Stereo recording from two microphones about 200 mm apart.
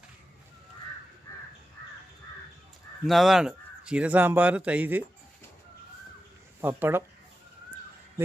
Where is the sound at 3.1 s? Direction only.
Centre (ahead or behind).